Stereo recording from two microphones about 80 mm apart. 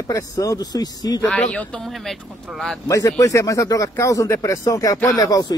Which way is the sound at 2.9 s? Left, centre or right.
Left.